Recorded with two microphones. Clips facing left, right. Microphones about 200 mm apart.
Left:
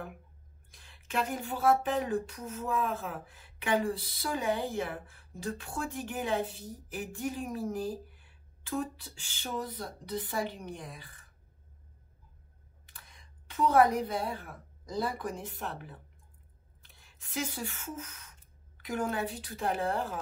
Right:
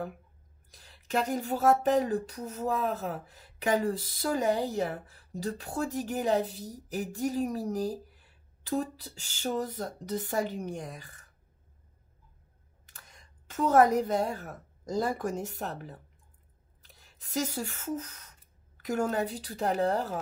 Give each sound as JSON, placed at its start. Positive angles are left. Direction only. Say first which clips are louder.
{"t": 0.7, "sound": "speech", "louder": "right 7 dB", "side_deg": -40}
{"t": 12.8, "sound": "speech", "louder": "right 1 dB", "side_deg": -45}